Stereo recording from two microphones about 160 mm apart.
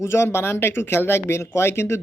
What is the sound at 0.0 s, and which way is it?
Speech, 15° left (ahead or behind).